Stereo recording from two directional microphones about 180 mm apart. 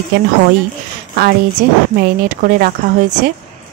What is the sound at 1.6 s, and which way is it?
Speech, 55° right (ahead or behind).